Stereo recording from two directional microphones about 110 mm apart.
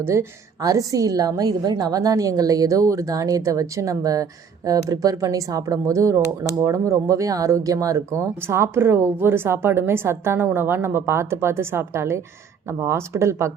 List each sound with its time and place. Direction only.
0.0 s a woman's voice: 25° right (ahead or behind)